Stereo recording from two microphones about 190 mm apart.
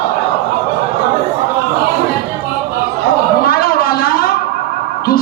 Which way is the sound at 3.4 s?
50° left (ahead or behind).